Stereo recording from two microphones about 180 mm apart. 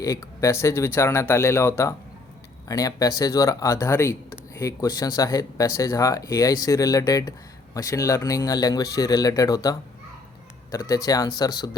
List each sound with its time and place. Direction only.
0.0 s speech: 20° left (ahead or behind)